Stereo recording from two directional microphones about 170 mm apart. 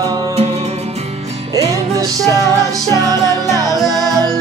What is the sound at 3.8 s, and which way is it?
Music, centre (ahead or behind).